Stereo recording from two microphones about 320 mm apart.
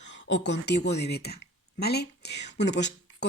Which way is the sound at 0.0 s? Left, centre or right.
Left.